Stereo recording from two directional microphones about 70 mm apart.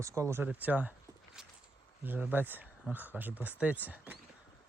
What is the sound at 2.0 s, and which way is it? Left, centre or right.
Speech, right.